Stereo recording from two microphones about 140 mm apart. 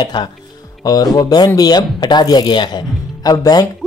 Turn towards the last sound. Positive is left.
turn(degrees=30)  # may be behind; listen again after turning